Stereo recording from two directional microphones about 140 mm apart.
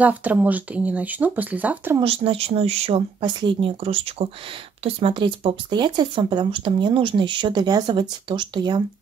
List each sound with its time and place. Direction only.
0.0 s speech: 10° right (ahead or behind)
2.0 s speech: 40° right (ahead or behind)